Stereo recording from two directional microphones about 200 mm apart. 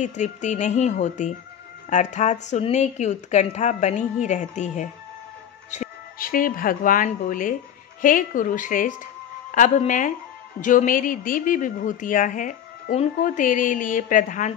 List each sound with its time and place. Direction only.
0.0 s speech: 35° left (ahead or behind)